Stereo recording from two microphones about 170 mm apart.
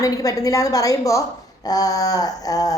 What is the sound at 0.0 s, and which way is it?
Speech, 20° left (ahead or behind).